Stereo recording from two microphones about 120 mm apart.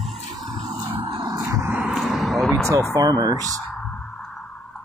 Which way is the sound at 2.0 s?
Centre (ahead or behind).